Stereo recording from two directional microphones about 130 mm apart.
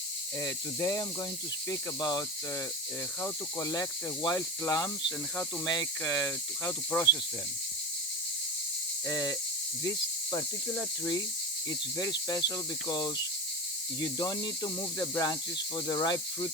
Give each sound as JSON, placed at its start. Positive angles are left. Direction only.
{"t": 0.4, "sound": "speech", "side_deg": 25}
{"t": 9.0, "sound": "speech", "side_deg": 30}
{"t": 10.3, "sound": "speech", "side_deg": 25}